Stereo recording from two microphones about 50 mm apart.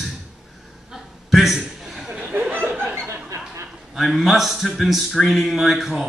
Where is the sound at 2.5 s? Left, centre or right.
Right.